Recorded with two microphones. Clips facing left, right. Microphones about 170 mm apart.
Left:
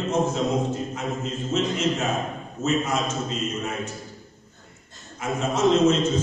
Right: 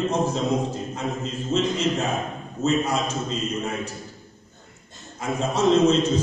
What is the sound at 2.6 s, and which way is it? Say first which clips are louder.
Speech: right 1 dB; 35° right (ahead or behind).